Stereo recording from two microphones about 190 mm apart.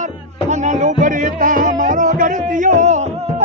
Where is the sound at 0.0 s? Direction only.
40° right (ahead or behind).